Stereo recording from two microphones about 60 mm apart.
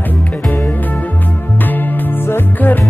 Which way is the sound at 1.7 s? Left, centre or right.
Left.